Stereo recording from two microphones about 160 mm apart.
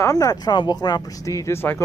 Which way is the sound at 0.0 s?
20° left (ahead or behind).